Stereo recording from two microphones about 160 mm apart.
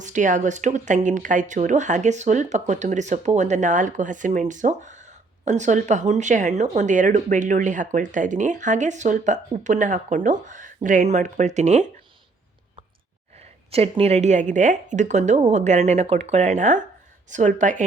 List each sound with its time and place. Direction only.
0.0 s speech: 50° right (ahead or behind)
13.4 s speech: 40° right (ahead or behind)